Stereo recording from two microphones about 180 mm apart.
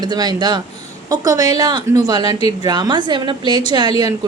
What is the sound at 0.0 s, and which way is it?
A woman's voice, 25° right (ahead or behind).